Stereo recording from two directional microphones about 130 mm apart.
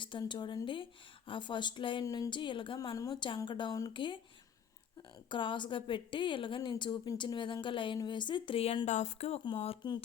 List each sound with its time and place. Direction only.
0.0 s a woman's voice: 35° left (ahead or behind)
5.3 s a woman's voice: 40° left (ahead or behind)
8.9 s speech: 60° left (ahead or behind)
9.4 s speech: 45° left (ahead or behind)